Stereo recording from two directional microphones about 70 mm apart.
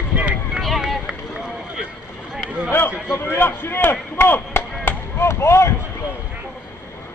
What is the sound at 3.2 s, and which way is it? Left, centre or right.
Speech, left.